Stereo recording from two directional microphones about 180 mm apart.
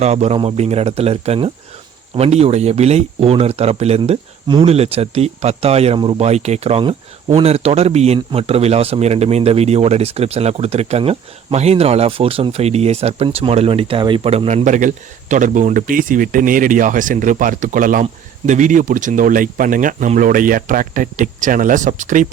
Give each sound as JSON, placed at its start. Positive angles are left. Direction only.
{"t": 0.0, "sound": "speech", "side_deg": -35}